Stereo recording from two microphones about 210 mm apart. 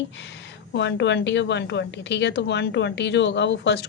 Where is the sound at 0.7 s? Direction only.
60° left (ahead or behind).